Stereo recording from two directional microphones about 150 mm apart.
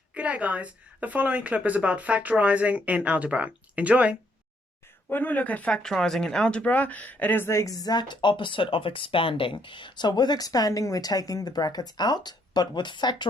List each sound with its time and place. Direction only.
0.1 s a woman's voice: 10° right (ahead or behind)
5.0 s speech: 10° left (ahead or behind); by 13.2 s 30° left (ahead or behind)